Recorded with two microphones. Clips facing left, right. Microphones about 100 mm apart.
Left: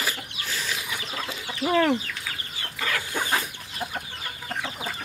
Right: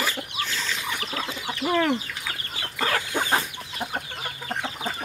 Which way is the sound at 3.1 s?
20° right (ahead or behind).